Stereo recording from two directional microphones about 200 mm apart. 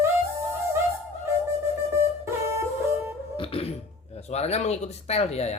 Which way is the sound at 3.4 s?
30° left (ahead or behind).